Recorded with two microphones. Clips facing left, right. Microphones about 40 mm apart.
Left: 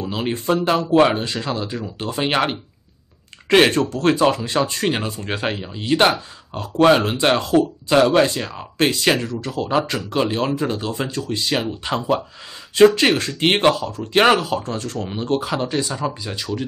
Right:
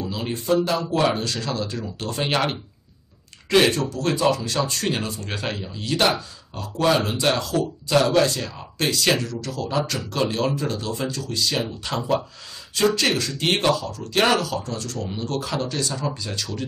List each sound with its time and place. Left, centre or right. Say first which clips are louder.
0.1 s speech: left 2 dB; left
3.4 s speech: left 4 dB; left